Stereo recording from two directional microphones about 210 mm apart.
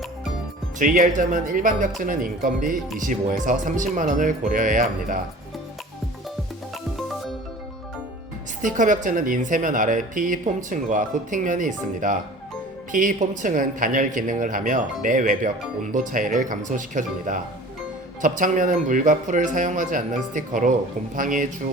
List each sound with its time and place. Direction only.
0.8 s a man's voice: 40° right (ahead or behind)
8.6 s a man's voice: 40° right (ahead or behind)